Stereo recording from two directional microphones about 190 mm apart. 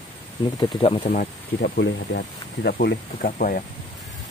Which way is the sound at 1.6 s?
65° left (ahead or behind).